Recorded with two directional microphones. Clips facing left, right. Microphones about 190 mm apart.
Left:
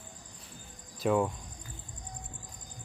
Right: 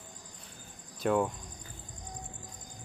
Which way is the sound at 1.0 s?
Centre (ahead or behind).